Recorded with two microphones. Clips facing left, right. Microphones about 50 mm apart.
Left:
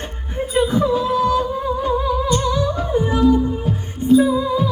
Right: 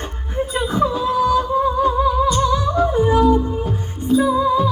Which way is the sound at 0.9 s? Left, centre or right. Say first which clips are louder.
Even; centre.